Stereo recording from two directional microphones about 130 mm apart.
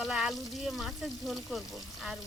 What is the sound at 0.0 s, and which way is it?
Speech, centre (ahead or behind).